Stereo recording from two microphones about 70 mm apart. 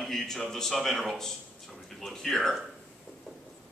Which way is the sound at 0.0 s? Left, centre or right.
Centre.